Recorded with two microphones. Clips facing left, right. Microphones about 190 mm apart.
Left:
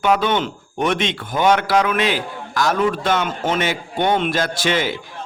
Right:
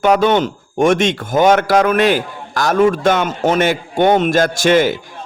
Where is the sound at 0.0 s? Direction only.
45° right (ahead or behind).